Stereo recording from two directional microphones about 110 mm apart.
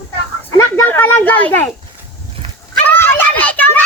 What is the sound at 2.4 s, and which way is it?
Dog, 55° right (ahead or behind).